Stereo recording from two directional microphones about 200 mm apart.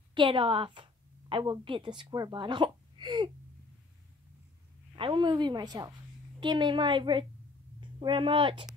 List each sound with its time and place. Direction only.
0.1 s a woman's voice: 25° right (ahead or behind)
4.9 s speech: 25° right (ahead or behind)